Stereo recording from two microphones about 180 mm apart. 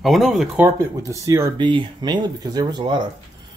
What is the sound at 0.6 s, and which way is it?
Speech, 15° right (ahead or behind).